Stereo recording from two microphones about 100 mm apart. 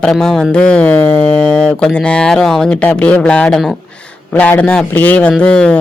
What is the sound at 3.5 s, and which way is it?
Speech, centre (ahead or behind).